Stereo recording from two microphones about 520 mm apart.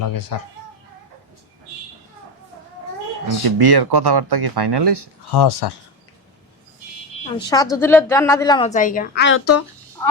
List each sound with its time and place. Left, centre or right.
0.0 s speech: left
3.4 s speech: right
5.3 s speech: left
7.3 s speech: centre; by 9.6 s left